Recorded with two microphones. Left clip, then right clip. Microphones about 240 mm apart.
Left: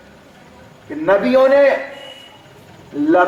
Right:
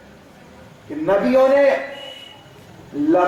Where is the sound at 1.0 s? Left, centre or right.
Left.